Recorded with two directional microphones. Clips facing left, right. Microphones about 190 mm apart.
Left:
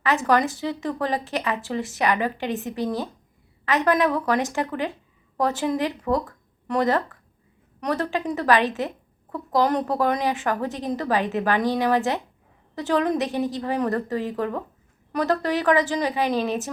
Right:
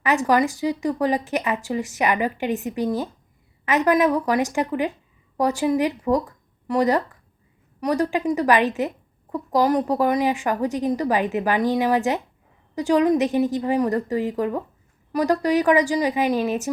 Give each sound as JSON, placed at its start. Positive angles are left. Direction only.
{"t": 0.0, "sound": "speech", "side_deg": -15}